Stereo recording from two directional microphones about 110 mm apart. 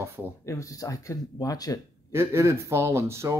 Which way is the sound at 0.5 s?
30° left (ahead or behind).